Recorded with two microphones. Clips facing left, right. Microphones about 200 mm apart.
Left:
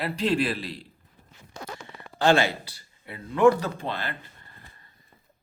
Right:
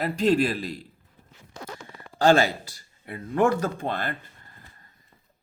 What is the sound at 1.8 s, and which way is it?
A man's voice, 40° right (ahead or behind).